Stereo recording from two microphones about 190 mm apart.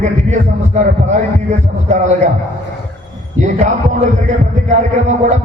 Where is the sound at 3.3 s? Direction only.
40° right (ahead or behind).